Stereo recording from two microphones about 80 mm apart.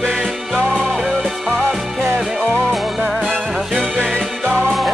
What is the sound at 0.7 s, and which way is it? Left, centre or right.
Music, centre.